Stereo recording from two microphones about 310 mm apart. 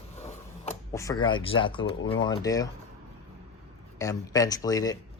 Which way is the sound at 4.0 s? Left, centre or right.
Centre.